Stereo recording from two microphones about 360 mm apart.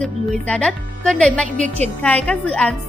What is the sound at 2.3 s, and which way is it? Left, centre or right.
Speech, centre.